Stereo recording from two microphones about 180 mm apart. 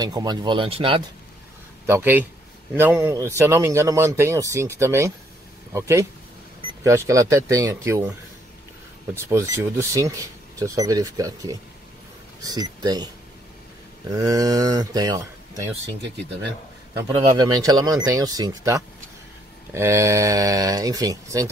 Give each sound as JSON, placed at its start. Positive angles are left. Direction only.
{"t": 0.0, "sound": "speech", "side_deg": -20}
{"t": 1.9, "sound": "speech", "side_deg": -10}
{"t": 16.9, "sound": "speech", "side_deg": -20}